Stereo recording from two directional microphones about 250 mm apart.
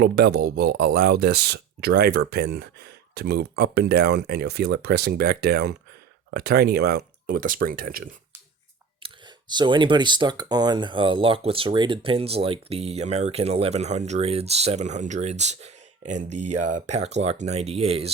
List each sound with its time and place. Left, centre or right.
0.0 s speech: right
9.0 s speech: centre